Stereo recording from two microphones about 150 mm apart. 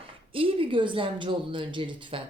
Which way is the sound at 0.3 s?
35° right (ahead or behind).